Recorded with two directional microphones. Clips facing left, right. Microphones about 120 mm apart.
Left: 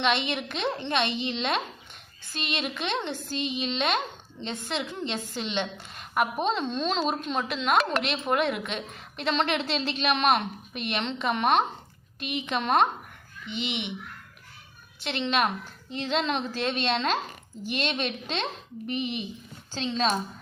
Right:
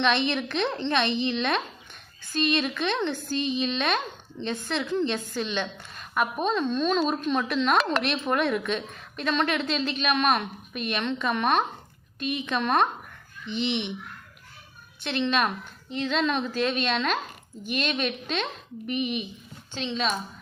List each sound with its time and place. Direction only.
0.0 s a woman's voice: 20° left (ahead or behind)
15.0 s a woman's voice: 20° left (ahead or behind)